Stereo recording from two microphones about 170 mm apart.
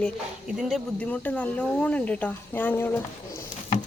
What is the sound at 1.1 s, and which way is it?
Speech, 10° left (ahead or behind).